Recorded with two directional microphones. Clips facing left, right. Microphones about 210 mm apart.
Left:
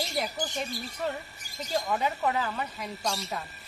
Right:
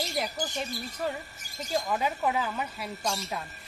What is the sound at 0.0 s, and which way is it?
Speech, centre (ahead or behind).